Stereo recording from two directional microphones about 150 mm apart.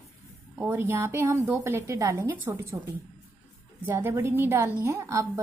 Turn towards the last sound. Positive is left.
turn(degrees=-20)  # may be behind; listen again after turning